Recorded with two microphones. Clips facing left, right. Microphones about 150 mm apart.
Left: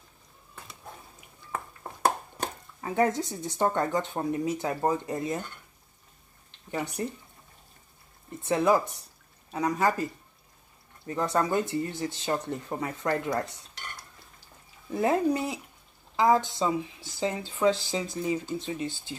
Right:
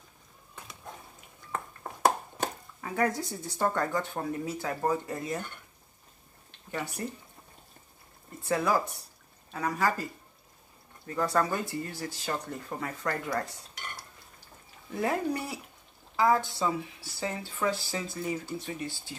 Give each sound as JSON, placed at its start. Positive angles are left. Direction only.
{"t": 1.5, "sound": "ping", "side_deg": 0}
{"t": 2.8, "sound": "speech", "side_deg": 25}
{"t": 8.4, "sound": "speech", "side_deg": 20}
{"t": 11.1, "sound": "speech", "side_deg": 20}
{"t": 15.0, "sound": "speech", "side_deg": 20}